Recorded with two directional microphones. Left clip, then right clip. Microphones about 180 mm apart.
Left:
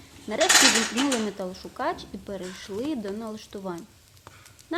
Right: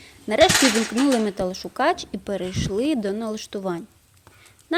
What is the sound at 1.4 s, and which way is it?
Speech, 35° right (ahead or behind).